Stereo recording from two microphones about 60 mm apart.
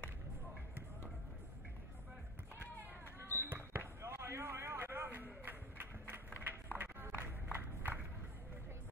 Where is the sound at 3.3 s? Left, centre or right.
Right.